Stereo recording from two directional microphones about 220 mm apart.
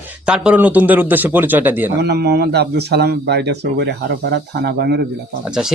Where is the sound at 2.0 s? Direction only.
50° right (ahead or behind).